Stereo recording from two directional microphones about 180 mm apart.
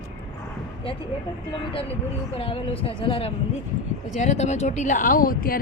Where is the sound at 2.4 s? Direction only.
30° left (ahead or behind).